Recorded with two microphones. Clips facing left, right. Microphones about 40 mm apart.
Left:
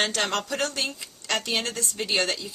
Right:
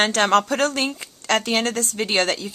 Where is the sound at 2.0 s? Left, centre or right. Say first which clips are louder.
Right 4 dB; right.